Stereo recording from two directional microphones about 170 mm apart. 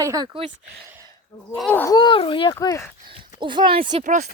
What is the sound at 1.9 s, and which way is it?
Speech, 30° left (ahead or behind).